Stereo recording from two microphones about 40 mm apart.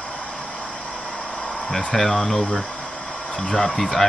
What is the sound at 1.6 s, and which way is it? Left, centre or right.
Speech, centre.